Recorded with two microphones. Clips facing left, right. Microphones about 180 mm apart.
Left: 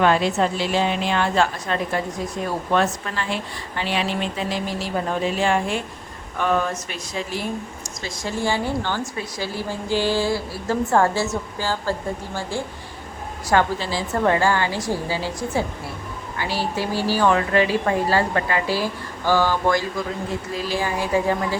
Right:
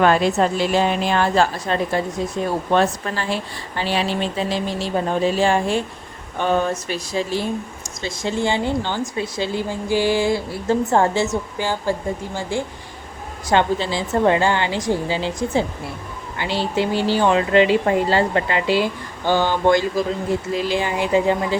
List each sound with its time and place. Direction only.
0.0 s a woman's voice: 45° right (ahead or behind); by 21.3 s 20° right (ahead or behind)